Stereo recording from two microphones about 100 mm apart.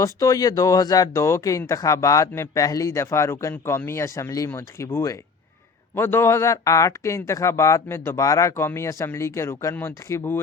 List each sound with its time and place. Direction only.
0.0 s speech: 35° left (ahead or behind)